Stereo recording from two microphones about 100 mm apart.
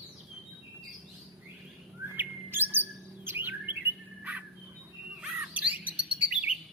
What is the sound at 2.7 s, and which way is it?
Bird, 20° right (ahead or behind).